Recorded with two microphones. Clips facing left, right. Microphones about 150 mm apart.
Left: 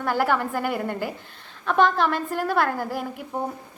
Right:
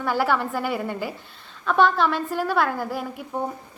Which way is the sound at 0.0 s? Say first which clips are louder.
Even; 50° left (ahead or behind).